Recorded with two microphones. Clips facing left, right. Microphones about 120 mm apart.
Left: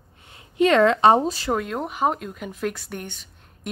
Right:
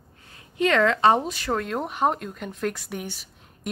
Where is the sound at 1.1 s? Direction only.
35° left (ahead or behind).